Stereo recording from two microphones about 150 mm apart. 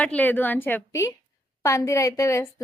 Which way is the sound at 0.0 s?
10° left (ahead or behind).